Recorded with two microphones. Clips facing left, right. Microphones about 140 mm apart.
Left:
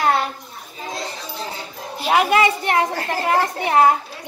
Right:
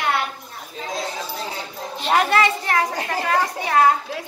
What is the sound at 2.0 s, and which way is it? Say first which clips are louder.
A woman's voice: left 2 dB; 5° left (ahead or behind).